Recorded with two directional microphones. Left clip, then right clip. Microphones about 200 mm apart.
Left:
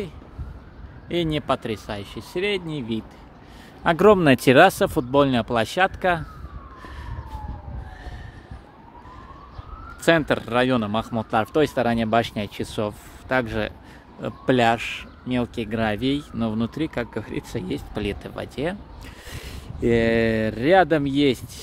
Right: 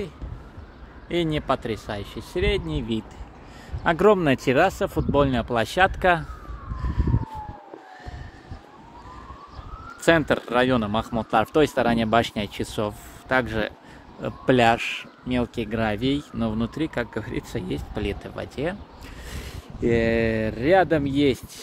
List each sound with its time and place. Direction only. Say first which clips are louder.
1.0 s speech: even; 15° left (ahead or behind); by 3.1 s centre (ahead or behind)
3.8 s speech: left 3 dB; 15° left (ahead or behind); by 6.2 s centre (ahead or behind)
6.8 s emergency vehicle: right 6 dB; 15° left (ahead or behind)
10.0 s speech: even; 5° left (ahead or behind)
14.2 s speech: right 1 dB; centre (ahead or behind)